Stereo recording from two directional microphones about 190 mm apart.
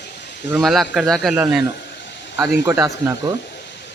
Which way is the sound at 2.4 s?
15° right (ahead or behind).